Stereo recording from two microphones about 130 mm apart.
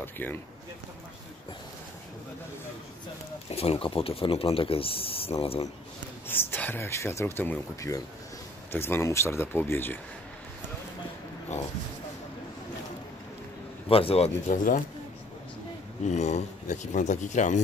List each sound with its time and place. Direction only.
0.0 s speech: 15° left (ahead or behind)
3.4 s speech: 50° left (ahead or behind)
6.2 s speech: 15° left (ahead or behind)
13.8 s speech: 45° left (ahead or behind)
14.5 s speech: 90° left
16.1 s speech: 60° left (ahead or behind)